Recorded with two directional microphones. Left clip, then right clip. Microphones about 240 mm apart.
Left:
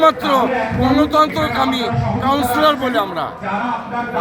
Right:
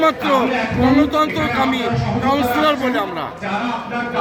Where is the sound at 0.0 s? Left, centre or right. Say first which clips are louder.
Left 2 dB; centre.